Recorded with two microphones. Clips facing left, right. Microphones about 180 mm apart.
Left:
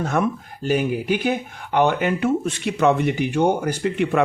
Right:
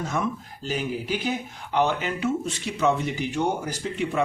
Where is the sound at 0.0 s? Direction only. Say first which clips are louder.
Left 6 dB; 60° left (ahead or behind).